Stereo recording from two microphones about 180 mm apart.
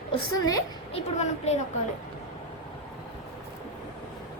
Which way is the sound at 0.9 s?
35° left (ahead or behind).